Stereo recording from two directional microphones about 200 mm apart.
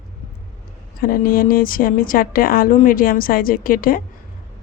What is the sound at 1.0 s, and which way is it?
Speech, 45° left (ahead or behind).